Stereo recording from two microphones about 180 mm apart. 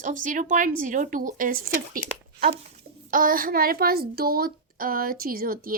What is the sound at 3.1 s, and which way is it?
A woman's voice, 50° right (ahead or behind).